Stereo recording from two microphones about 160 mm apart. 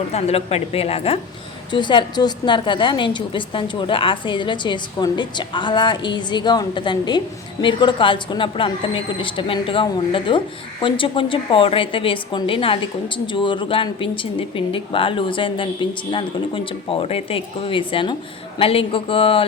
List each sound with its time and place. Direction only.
0.1 s a woman's voice: 40° left (ahead or behind)